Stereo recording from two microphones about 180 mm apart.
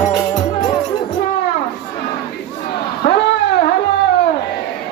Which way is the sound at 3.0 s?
65° left (ahead or behind).